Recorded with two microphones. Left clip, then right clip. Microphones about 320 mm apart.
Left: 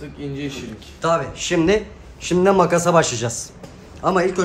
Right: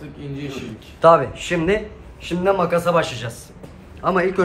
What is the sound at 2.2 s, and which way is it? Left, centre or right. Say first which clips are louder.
Speech: left 3 dB; left.